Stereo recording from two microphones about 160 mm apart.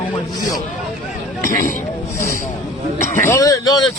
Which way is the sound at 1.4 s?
60° left (ahead or behind).